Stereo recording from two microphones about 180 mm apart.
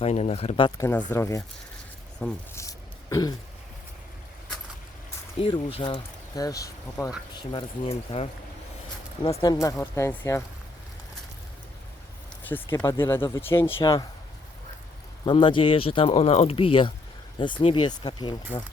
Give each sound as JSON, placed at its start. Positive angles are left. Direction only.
{"t": 0.0, "sound": "speech", "side_deg": 35}
{"t": 0.8, "sound": "speech", "side_deg": 10}
{"t": 2.6, "sound": "throat clearing", "side_deg": 20}
{"t": 5.4, "sound": "speech", "side_deg": 30}
{"t": 7.3, "sound": "speech", "side_deg": 30}
{"t": 12.7, "sound": "speech", "side_deg": 15}
{"t": 15.2, "sound": "speech", "side_deg": 25}